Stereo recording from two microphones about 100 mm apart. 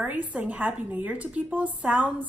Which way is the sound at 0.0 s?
15° right (ahead or behind).